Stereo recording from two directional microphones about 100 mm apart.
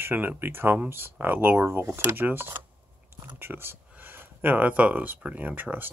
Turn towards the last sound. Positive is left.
turn(degrees=-15)  # may be behind; listen again after turning